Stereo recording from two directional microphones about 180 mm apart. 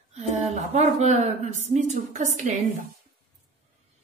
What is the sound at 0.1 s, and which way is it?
A woman's voice, 40° right (ahead or behind).